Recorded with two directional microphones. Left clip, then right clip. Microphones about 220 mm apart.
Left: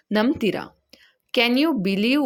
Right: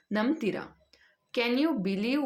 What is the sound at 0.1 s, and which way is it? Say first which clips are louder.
Speech: left 8 dB; 40° left (ahead or behind).